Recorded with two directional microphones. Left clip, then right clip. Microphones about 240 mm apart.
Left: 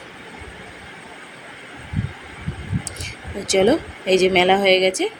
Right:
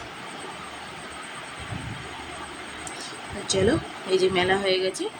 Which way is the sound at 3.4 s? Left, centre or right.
Centre.